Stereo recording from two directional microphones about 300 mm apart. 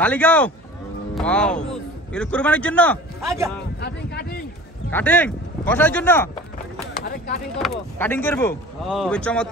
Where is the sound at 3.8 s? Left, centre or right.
Left.